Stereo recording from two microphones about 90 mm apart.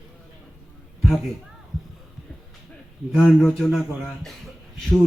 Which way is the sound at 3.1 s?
10° left (ahead or behind).